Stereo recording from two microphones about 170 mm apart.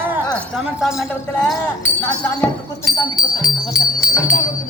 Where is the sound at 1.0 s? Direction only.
10° left (ahead or behind).